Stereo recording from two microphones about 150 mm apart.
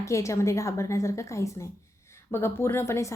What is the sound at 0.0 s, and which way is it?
A woman's voice, 20° left (ahead or behind).